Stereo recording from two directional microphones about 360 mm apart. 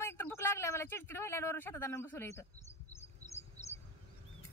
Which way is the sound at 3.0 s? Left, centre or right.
Centre.